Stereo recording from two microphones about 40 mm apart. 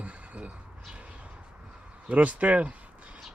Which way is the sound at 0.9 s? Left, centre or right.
Right.